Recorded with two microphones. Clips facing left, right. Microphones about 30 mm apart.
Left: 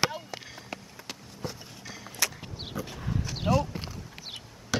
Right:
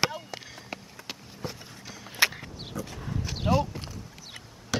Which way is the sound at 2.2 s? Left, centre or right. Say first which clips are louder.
Right 6 dB; right.